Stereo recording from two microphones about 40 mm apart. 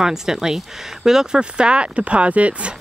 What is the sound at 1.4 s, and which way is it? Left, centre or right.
Speech, right.